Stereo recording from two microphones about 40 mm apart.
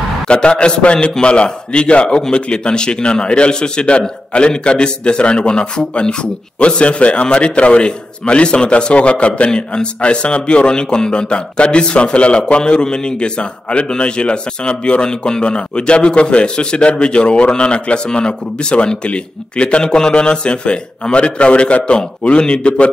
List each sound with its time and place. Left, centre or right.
0.3 s speech: left